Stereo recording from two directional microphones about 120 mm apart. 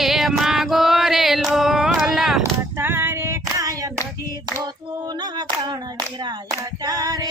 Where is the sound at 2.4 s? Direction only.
20° right (ahead or behind).